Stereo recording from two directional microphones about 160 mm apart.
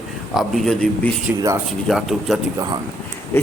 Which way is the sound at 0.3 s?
Centre (ahead or behind).